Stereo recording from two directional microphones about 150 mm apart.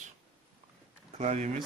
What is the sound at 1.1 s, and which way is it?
Speech, 50° right (ahead or behind).